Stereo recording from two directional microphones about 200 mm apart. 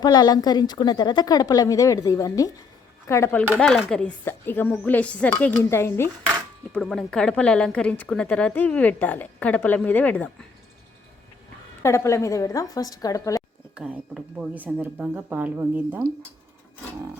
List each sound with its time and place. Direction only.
0.0 s a woman's voice: 20° left (ahead or behind)
3.6 s a woman's voice: centre (ahead or behind)
11.8 s a woman's voice: 15° left (ahead or behind)
13.7 s speech: 5° right (ahead or behind)